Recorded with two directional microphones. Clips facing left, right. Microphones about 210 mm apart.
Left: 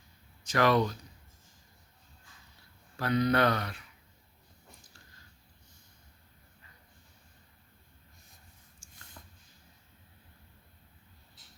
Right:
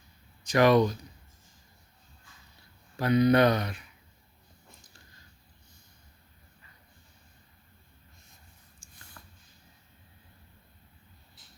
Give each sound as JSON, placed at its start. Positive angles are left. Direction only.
{"t": 0.4, "sound": "speech", "side_deg": -15}
{"t": 3.0, "sound": "speech", "side_deg": -15}